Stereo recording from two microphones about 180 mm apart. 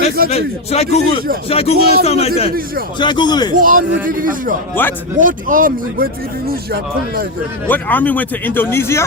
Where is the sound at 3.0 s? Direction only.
25° left (ahead or behind).